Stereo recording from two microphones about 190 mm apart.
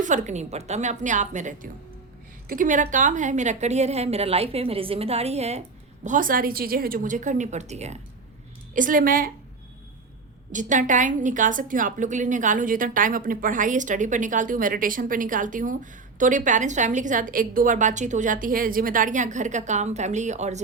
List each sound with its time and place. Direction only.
0.0 s a woman's voice: 40° right (ahead or behind)
6.1 s a woman's voice: 45° right (ahead or behind)
10.5 s a woman's voice: 40° right (ahead or behind)